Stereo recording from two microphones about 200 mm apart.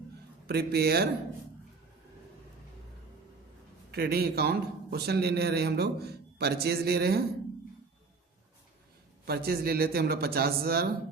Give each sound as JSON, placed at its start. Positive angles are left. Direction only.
{"t": 0.4, "sound": "a man's voice", "side_deg": -55}
{"t": 3.9, "sound": "a man's voice", "side_deg": -50}
{"t": 9.2, "sound": "a man's voice", "side_deg": -50}